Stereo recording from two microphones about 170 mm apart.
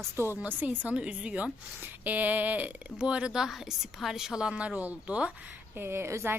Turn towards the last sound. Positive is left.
turn(degrees=-15)  # may be behind; listen again after turning